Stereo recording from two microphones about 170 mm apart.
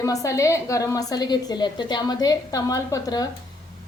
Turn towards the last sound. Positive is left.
turn(degrees=20)  # may be behind; listen again after turning